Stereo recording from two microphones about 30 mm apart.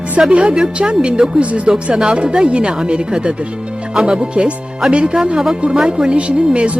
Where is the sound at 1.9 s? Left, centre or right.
Right.